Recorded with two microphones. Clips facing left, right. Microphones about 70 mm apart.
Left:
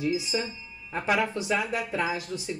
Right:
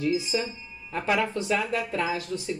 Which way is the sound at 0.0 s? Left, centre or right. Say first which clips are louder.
Right 2 dB; centre.